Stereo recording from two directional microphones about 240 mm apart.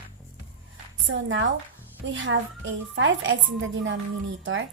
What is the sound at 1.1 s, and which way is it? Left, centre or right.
A woman's voice, right.